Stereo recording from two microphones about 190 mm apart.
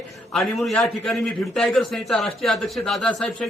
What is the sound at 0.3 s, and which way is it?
A man's voice, centre (ahead or behind).